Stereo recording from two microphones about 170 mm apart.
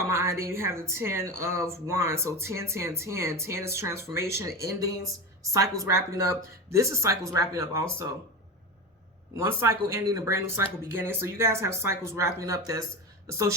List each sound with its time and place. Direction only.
0.0 s a woman's voice: 15° right (ahead or behind)
9.3 s speech: 15° right (ahead or behind)